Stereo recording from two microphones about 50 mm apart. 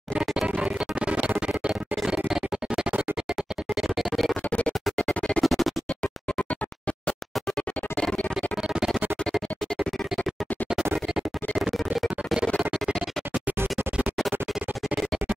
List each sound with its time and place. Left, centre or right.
0.2 s music: centre
0.5 s music: right
1.7 s music: centre
4.5 s music: left
5.4 s music: centre
8.4 s music: centre
11.1 s music: centre